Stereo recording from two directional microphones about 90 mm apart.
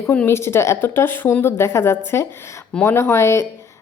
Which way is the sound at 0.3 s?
30° left (ahead or behind).